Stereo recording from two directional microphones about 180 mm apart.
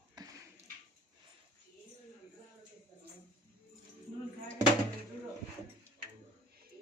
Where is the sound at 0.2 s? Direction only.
20° right (ahead or behind).